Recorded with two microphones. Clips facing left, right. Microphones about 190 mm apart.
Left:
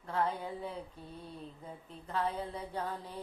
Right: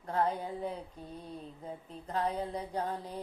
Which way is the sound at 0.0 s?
40° right (ahead or behind).